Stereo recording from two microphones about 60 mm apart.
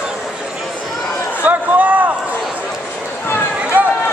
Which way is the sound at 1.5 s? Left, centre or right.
Right.